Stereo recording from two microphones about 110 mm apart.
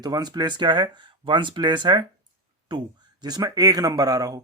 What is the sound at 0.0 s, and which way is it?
A man's voice, 40° right (ahead or behind).